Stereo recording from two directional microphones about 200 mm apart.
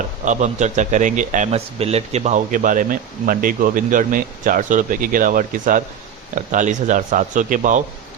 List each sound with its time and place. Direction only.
0.3 s a man's voice: 35° right (ahead or behind)